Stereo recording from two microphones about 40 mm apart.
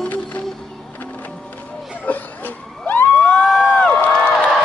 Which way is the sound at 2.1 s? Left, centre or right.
Left.